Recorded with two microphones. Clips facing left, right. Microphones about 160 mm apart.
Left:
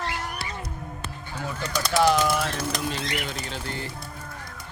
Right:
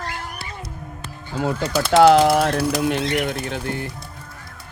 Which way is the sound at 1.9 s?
80° right.